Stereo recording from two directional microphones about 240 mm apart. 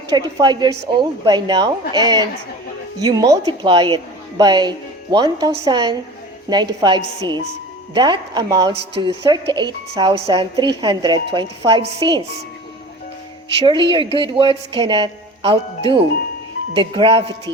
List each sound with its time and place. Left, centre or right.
0.1 s a woman's voice: centre
13.6 s a woman's voice: right